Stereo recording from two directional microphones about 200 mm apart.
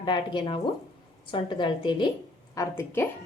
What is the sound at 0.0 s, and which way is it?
A woman's voice, 25° left (ahead or behind).